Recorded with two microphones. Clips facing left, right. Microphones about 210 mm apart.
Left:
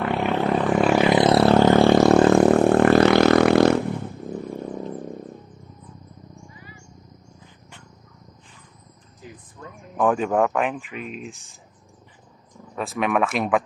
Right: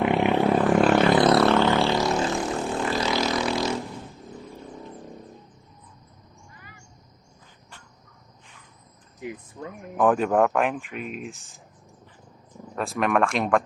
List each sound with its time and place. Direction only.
0.0 s a sound: 15° right (ahead or behind); by 1.0 s 5° left (ahead or behind)
1.0 s music: 20° left (ahead or behind)
1.5 s vehicle: 50° left (ahead or behind)
9.6 s a sound: 30° right (ahead or behind)
10.0 s speech: centre (ahead or behind)
12.7 s speech: centre (ahead or behind)